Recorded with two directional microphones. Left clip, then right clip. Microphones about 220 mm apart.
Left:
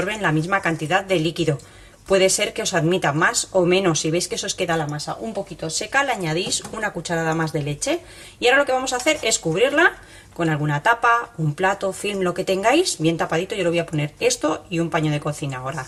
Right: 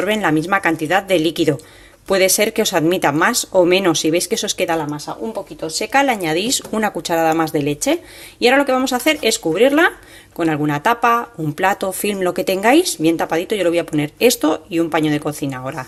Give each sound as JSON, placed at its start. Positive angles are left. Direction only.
{"t": 0.1, "sound": "speech", "side_deg": -35}